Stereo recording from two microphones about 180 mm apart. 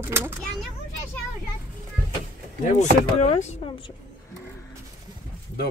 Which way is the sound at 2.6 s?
40° left (ahead or behind).